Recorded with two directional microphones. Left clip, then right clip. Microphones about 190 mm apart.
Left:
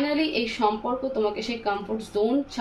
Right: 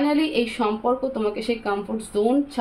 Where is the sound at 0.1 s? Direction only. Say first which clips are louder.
Right 3 dB; 55° right (ahead or behind).